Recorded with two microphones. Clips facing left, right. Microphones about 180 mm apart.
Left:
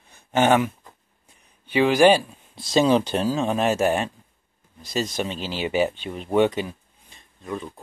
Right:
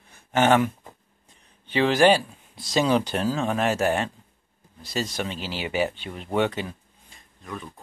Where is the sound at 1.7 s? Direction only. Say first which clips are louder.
Left 2 dB; 10° left (ahead or behind).